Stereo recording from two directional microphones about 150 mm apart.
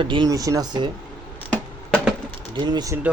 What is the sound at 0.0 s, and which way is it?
Speech, 30° right (ahead or behind).